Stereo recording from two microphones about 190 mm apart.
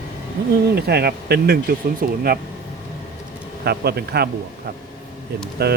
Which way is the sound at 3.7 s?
55° right (ahead or behind).